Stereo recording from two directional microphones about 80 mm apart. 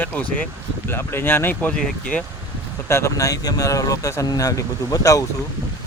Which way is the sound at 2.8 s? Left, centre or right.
Left.